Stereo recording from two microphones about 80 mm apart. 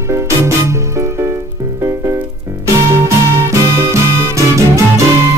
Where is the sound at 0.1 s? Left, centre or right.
Right.